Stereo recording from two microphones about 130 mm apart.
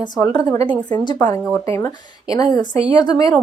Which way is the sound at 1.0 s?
30° left (ahead or behind).